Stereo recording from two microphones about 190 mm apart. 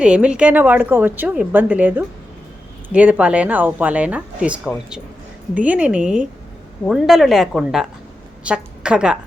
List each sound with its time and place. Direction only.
0.0 s a woman's voice: 5° right (ahead or behind)